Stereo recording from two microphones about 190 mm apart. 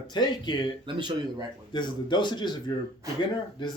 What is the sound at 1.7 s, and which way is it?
Speech, 25° left (ahead or behind).